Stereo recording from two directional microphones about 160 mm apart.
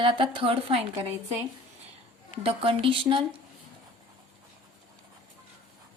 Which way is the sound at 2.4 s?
35° right (ahead or behind).